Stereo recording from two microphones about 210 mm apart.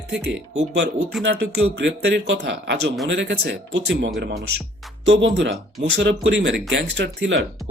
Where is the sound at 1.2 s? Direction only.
55° right (ahead or behind).